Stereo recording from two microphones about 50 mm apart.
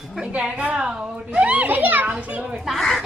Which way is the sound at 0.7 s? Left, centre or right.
Centre.